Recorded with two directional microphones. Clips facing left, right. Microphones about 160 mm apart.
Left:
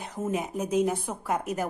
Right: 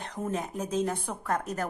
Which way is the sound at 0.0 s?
5° left (ahead or behind).